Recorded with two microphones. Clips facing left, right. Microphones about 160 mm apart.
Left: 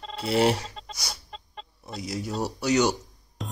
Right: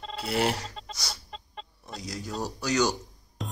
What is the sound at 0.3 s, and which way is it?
Speech, 25° left (ahead or behind).